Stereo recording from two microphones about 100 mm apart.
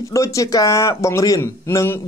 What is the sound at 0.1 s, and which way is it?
A man's voice, 35° left (ahead or behind).